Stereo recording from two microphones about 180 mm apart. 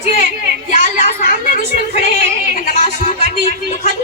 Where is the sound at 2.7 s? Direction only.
45° left (ahead or behind).